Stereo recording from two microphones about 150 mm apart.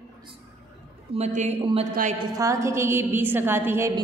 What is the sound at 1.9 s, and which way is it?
Speech, 60° right (ahead or behind).